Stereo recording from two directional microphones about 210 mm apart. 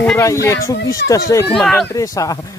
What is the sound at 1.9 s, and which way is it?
Speech, 15° left (ahead or behind).